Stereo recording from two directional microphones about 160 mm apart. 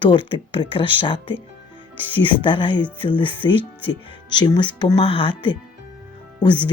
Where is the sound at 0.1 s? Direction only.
30° left (ahead or behind).